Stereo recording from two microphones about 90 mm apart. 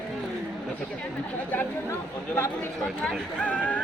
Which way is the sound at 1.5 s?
20° left (ahead or behind).